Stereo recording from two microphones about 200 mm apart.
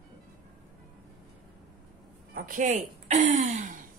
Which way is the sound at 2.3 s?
40° right (ahead or behind).